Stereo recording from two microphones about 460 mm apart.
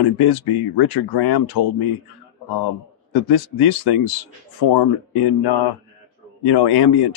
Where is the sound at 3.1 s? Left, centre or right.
Left.